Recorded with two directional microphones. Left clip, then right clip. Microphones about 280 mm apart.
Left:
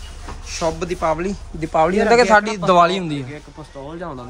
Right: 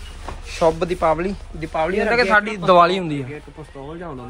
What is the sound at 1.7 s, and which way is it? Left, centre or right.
A man's voice, centre.